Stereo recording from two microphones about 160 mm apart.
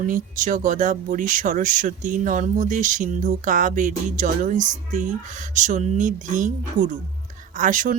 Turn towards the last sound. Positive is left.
turn(degrees=-50)  # may be behind; listen again after turning